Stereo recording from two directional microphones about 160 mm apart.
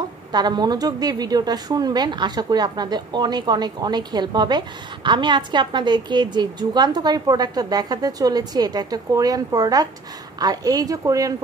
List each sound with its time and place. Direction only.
0.3 s a woman's voice: 25° right (ahead or behind)